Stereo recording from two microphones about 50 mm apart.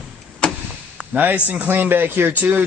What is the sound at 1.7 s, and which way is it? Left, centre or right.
Speech, right.